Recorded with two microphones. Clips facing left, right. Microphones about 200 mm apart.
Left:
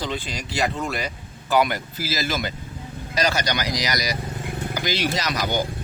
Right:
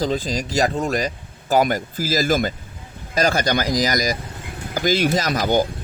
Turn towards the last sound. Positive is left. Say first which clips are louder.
# right 6 dB
turn(degrees=-50)  # may be behind; listen again after turning